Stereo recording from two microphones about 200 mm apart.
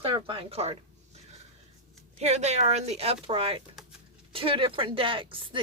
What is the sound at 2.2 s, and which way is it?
Speech, 35° right (ahead or behind).